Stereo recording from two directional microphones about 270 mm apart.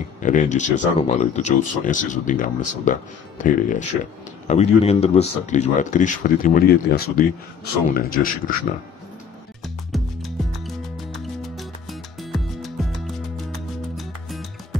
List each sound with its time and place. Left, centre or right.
0.2 s speech: left
9.9 s music: centre